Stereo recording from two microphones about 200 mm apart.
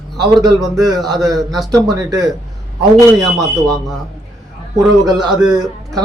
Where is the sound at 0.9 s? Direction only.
Centre (ahead or behind).